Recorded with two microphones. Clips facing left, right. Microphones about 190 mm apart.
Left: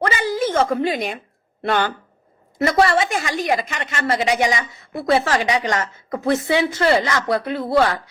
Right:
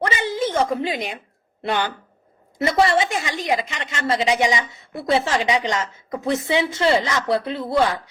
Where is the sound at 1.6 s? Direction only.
15° right (ahead or behind).